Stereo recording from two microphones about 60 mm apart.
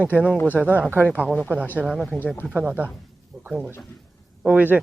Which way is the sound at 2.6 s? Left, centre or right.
Right.